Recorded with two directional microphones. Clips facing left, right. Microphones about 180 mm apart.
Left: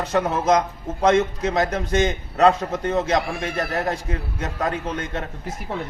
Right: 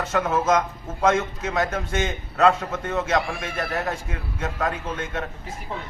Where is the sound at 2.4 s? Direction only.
35° left (ahead or behind).